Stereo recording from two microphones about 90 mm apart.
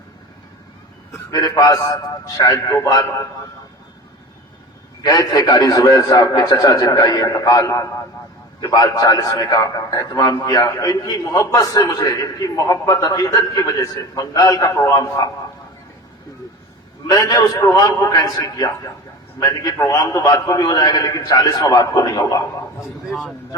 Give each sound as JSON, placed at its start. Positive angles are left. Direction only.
{"t": 1.3, "sound": "a man's voice", "side_deg": 45}
{"t": 5.0, "sound": "a man's voice", "side_deg": 45}
{"t": 17.1, "sound": "a man's voice", "side_deg": 40}
{"t": 22.8, "sound": "speech", "side_deg": 0}